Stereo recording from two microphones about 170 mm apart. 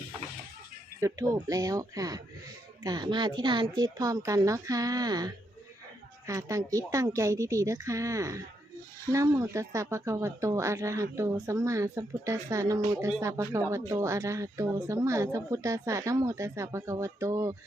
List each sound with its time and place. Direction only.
1.0 s a woman's voice: 20° right (ahead or behind)